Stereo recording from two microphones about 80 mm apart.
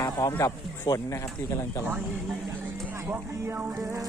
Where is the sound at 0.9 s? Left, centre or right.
Left.